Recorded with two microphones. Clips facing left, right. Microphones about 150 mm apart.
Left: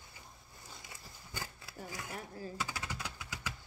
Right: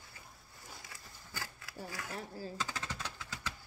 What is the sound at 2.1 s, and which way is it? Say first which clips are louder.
Speech: right 1 dB; 30° right (ahead or behind).